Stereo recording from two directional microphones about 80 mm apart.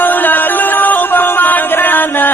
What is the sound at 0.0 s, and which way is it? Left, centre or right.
Music, left.